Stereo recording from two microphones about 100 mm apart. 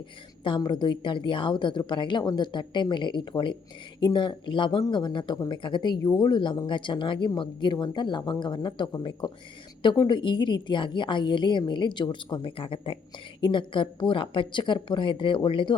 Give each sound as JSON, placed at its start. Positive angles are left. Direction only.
{"t": 0.4, "sound": "a woman's voice", "side_deg": 50}
{"t": 10.1, "sound": "a woman's voice", "side_deg": 50}